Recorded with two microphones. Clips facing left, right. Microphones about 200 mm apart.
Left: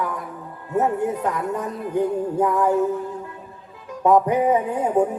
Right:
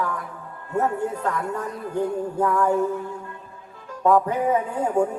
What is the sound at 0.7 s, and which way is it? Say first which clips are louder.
Music: left 3 dB; 20° left (ahead or behind).